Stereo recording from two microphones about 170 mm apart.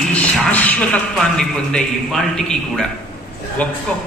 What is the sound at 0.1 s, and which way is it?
A man's voice, 10° left (ahead or behind).